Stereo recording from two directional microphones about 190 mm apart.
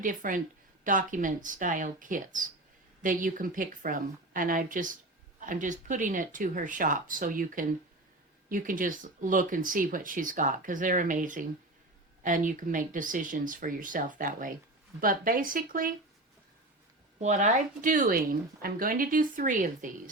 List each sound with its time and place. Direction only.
0.0 s speech: 45° right (ahead or behind)
17.2 s speech: 40° right (ahead or behind)